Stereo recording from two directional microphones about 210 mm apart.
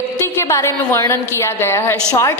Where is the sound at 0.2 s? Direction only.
10° left (ahead or behind).